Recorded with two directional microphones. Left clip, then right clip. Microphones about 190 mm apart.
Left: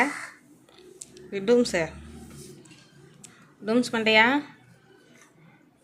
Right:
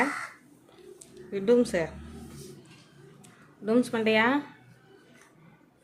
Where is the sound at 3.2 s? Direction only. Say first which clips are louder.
Left 2 dB; centre (ahead or behind).